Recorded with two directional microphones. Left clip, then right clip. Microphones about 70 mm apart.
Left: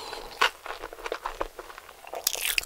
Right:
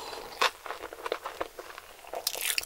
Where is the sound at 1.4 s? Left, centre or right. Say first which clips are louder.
Left 3 dB; left.